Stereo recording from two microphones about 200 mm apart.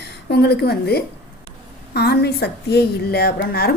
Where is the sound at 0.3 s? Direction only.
55° left (ahead or behind).